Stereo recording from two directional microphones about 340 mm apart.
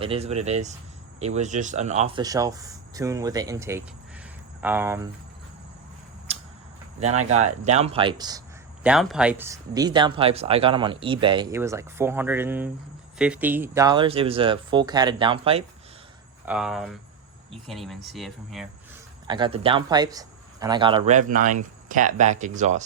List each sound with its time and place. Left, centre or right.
0.0 s speech: centre
6.3 s a sound: centre
7.0 s speech: centre
8.8 s speech: centre
16.5 s speech: centre
19.3 s speech: centre